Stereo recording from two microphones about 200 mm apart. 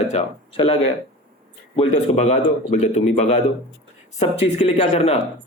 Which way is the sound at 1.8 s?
35° left (ahead or behind).